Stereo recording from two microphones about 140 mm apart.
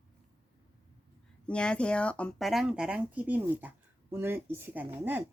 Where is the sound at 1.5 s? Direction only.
5° left (ahead or behind).